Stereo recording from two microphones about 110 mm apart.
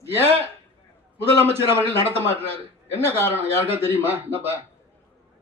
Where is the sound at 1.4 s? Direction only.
20° right (ahead or behind).